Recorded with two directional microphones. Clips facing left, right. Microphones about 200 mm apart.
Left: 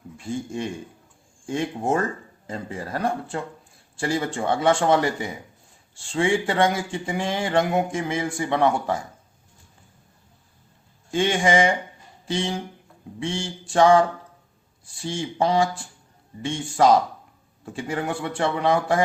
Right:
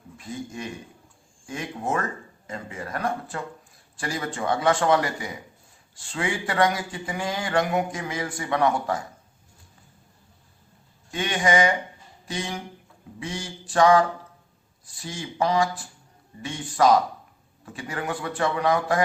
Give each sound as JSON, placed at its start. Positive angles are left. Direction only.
{"t": 0.2, "sound": "a man's voice", "side_deg": 30}
{"t": 11.1, "sound": "a man's voice", "side_deg": 25}